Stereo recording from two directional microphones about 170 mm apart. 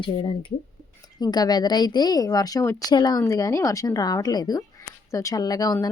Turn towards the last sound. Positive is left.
turn(degrees=20)  # may be behind; listen again after turning